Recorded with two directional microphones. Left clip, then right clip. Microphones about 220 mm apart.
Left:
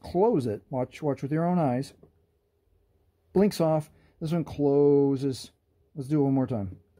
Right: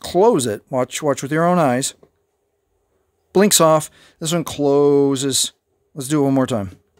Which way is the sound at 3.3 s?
30° right (ahead or behind).